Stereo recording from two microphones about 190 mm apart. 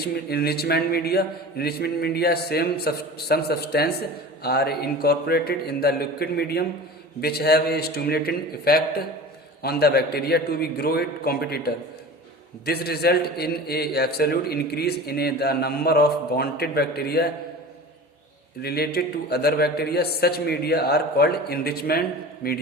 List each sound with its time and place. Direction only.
0.0 s a man's voice: 55° left (ahead or behind)
18.6 s a man's voice: 55° left (ahead or behind)